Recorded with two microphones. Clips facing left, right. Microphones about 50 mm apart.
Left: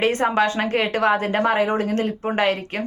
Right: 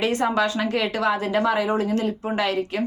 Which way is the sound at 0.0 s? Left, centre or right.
Left.